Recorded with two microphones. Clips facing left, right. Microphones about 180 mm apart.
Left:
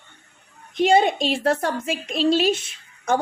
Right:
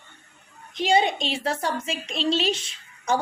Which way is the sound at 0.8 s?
55° left (ahead or behind).